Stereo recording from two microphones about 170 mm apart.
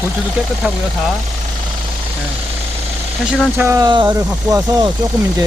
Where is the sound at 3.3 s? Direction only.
10° right (ahead or behind).